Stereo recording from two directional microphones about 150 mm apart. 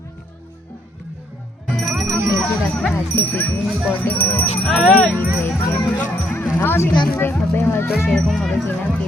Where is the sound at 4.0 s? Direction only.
10° left (ahead or behind).